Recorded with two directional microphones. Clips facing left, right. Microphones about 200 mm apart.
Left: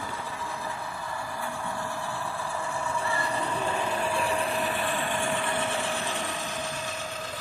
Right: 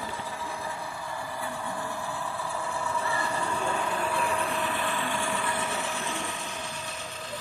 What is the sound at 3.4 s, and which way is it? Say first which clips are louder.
Train: left 1 dB; 25° left (ahead or behind).